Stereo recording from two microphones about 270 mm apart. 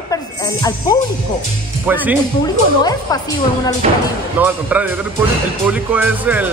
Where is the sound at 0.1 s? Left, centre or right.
Centre.